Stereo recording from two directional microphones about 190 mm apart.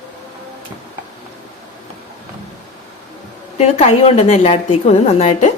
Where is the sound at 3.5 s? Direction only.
35° left (ahead or behind).